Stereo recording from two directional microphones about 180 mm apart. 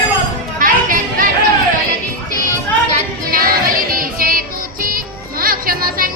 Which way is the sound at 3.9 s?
50° right (ahead or behind).